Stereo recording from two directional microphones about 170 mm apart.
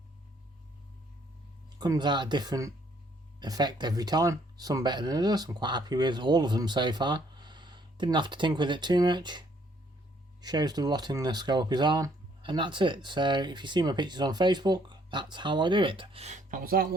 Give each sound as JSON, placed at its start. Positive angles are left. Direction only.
{"t": 1.8, "sound": "speech", "side_deg": -25}